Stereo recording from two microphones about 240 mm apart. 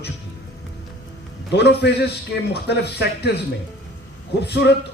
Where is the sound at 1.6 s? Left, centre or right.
Left.